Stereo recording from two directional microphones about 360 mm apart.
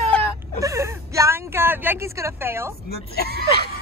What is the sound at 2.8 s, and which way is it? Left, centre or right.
Speech, left.